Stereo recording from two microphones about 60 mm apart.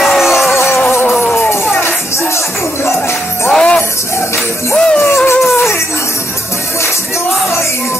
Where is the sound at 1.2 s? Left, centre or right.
Left.